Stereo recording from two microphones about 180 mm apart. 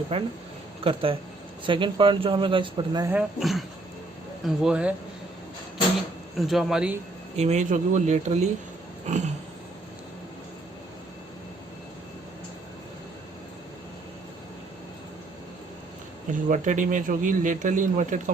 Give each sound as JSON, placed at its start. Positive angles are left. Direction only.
{"t": 0.1, "sound": "speech", "side_deg": -30}
{"t": 3.1, "sound": "speech", "side_deg": -5}
{"t": 6.3, "sound": "speech", "side_deg": 0}
{"t": 7.3, "sound": "speech", "side_deg": -40}
{"t": 16.3, "sound": "a man's voice", "side_deg": -45}